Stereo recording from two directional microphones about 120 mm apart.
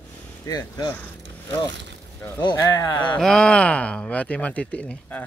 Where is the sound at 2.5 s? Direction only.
25° left (ahead or behind).